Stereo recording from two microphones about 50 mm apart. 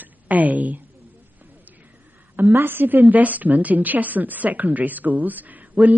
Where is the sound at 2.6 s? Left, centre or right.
Right.